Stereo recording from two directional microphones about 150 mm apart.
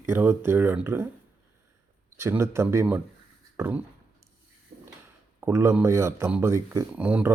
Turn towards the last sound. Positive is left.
turn(degrees=-10)  # may be behind; listen again after turning